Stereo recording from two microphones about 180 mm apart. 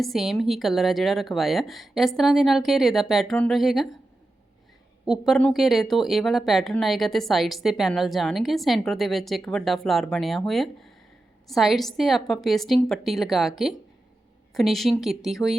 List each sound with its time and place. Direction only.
0.0 s speech: centre (ahead or behind)
5.0 s speech: centre (ahead or behind)
14.5 s speech: centre (ahead or behind)